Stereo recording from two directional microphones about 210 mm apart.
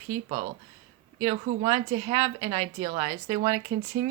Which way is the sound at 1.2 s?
20° right (ahead or behind).